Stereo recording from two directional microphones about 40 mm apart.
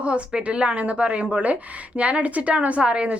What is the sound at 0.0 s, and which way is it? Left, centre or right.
A woman's voice, right.